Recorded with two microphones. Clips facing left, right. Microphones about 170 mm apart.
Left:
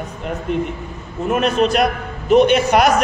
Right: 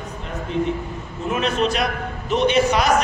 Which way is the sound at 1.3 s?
55° left (ahead or behind).